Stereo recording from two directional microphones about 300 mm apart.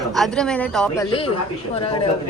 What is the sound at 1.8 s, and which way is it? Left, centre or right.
Speech, centre.